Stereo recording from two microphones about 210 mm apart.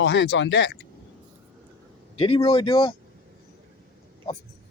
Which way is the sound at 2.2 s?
25° left (ahead or behind).